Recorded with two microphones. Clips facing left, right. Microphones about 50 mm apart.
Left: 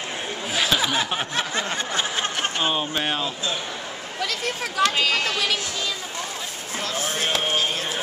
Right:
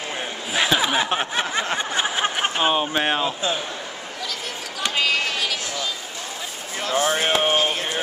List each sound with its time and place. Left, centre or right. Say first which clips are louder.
0.5 s a sound: right 2 dB; centre
4.2 s speech: left 6 dB; left
4.8 s speech: even; centre
6.8 s speech: right 6 dB; centre
7.1 s speech: right 4 dB; centre